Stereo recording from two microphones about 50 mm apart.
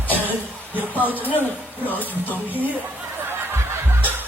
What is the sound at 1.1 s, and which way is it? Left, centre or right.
Speech, left.